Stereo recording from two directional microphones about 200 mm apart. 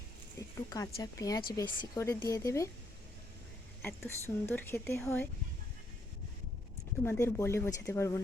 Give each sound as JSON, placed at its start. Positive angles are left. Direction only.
{"t": 0.3, "sound": "speech", "side_deg": 20}
{"t": 3.8, "sound": "speech", "side_deg": 10}
{"t": 7.0, "sound": "speech", "side_deg": 10}